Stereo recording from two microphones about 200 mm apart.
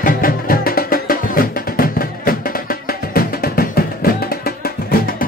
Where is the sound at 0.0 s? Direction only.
45° left (ahead or behind).